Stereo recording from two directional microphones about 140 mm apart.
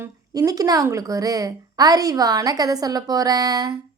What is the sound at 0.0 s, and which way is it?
A woman's voice, 25° right (ahead or behind).